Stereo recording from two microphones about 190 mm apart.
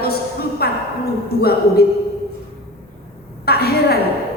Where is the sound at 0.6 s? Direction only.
55° left (ahead or behind).